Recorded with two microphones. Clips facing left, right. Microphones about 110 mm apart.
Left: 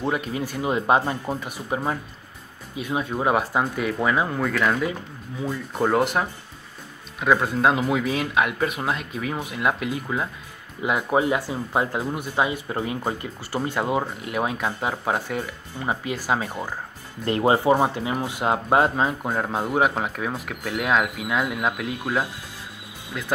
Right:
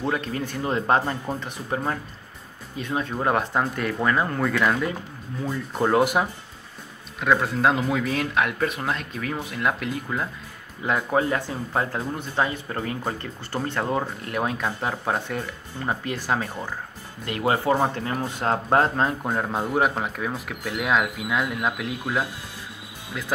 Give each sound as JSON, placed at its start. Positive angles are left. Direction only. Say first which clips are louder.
{"t": 0.0, "sound": "speech", "louder": "left 1 dB", "side_deg": 10}
{"t": 17.2, "sound": "speech", "louder": "left 4 dB", "side_deg": 30}
{"t": 17.6, "sound": "speech", "louder": "left 2 dB", "side_deg": 15}